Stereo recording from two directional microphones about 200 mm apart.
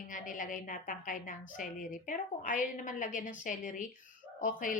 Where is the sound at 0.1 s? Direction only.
40° left (ahead or behind).